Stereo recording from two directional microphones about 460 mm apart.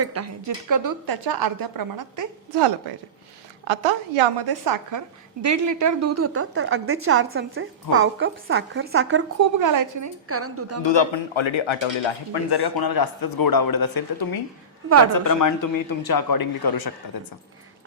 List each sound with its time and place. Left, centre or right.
0.0 s a woman's voice: right
3.7 s a woman's voice: right
4.4 s a woman's voice: right
9.4 s a woman's voice: right
10.2 s a woman's voice: right
10.8 s speech: left